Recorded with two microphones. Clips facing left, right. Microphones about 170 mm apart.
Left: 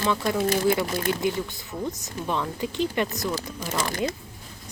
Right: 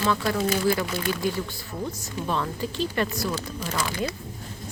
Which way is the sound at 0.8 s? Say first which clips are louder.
Left 2 dB; 40° left (ahead or behind).